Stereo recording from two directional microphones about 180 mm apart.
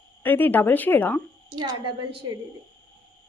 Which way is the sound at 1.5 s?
25° right (ahead or behind).